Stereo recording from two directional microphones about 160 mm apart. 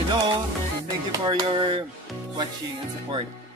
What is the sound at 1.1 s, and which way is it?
Music, 25° right (ahead or behind).